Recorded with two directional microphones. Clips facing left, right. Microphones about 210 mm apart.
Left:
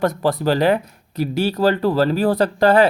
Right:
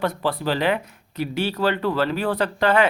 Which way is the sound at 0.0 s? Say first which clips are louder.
Left 5 dB; 45° left (ahead or behind).